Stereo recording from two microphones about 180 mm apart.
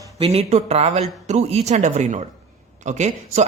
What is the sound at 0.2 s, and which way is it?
Speech, 35° right (ahead or behind).